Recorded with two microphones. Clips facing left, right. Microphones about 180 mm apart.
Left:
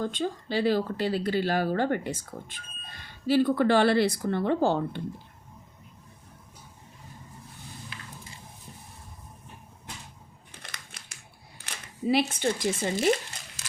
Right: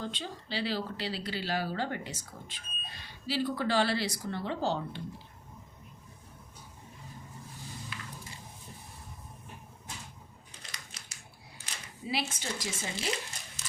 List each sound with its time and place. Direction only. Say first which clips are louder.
0.0 s speech: left 9 dB; 50° left (ahead or behind)
10.6 s crumpling: left 3 dB; 55° left (ahead or behind)
11.6 s speech: left 12 dB; 55° left (ahead or behind)